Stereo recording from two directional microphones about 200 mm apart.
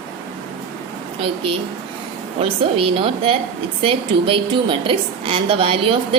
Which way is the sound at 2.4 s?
30° right (ahead or behind).